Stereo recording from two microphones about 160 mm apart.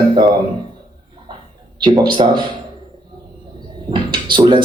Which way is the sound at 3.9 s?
30° right (ahead or behind).